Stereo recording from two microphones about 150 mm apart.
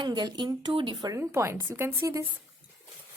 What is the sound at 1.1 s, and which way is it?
Speech, 20° right (ahead or behind).